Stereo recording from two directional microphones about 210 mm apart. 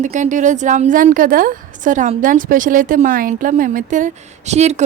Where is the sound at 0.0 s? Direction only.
35° right (ahead or behind).